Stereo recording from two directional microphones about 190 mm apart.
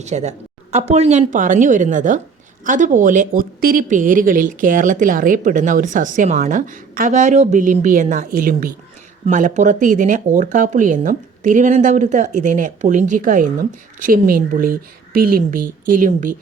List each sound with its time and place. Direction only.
0.0 s speech: 35° right (ahead or behind)